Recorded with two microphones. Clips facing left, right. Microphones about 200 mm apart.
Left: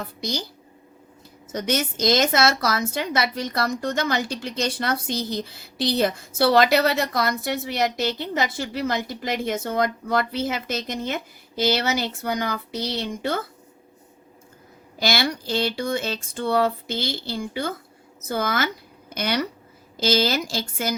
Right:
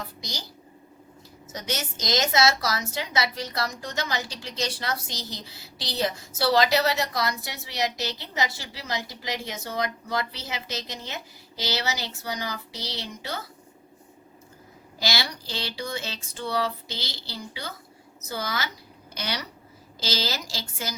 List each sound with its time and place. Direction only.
0.0 s a woman's voice: 55° left (ahead or behind)
1.5 s a woman's voice: 55° left (ahead or behind)
14.9 s a woman's voice: 55° left (ahead or behind)